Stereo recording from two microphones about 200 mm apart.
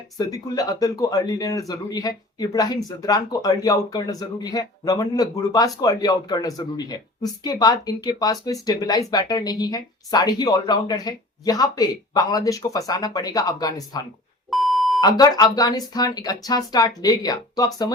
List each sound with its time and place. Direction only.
0.2 s speech: 20° left (ahead or behind)
14.5 s beep: centre (ahead or behind)
15.2 s speech: 20° left (ahead or behind)